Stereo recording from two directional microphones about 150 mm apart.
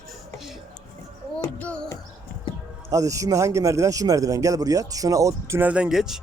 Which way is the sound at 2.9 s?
20° right (ahead or behind).